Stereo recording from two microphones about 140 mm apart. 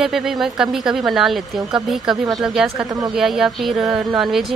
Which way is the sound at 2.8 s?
25° right (ahead or behind).